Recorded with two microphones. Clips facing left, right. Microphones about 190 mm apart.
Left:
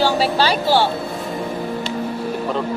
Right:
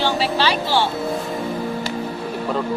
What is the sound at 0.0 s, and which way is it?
Speech, 40° left (ahead or behind).